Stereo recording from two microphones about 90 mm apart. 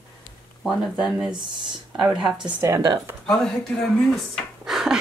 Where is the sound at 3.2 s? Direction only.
5° left (ahead or behind).